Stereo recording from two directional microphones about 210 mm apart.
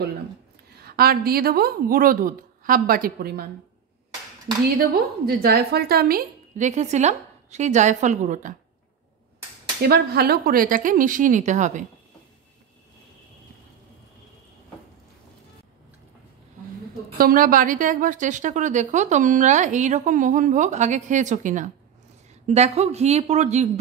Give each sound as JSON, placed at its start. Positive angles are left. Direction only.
{"t": 0.7, "sound": "speech", "side_deg": -45}
{"t": 4.7, "sound": "a woman's voice", "side_deg": -45}
{"t": 9.8, "sound": "a woman's voice", "side_deg": -50}
{"t": 17.2, "sound": "a woman's voice", "side_deg": -45}